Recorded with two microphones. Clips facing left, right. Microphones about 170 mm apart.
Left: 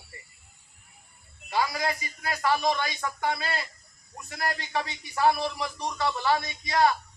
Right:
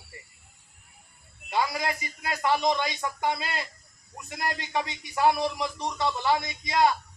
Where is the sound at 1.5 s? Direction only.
20° right (ahead or behind).